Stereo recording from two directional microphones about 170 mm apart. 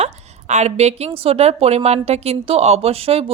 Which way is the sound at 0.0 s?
40° right (ahead or behind).